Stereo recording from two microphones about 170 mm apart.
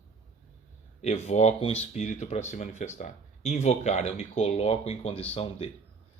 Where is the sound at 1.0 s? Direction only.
40° left (ahead or behind).